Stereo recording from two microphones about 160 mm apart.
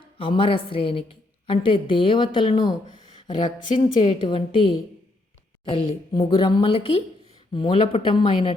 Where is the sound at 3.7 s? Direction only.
30° left (ahead or behind).